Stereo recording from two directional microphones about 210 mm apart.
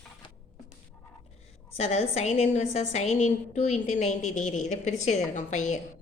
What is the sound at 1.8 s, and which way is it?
A woman's voice, 30° left (ahead or behind).